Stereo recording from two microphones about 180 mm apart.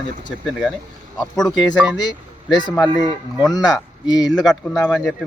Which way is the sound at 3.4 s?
20° left (ahead or behind).